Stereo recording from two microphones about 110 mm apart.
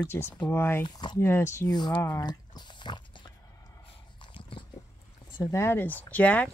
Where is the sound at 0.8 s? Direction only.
45° left (ahead or behind).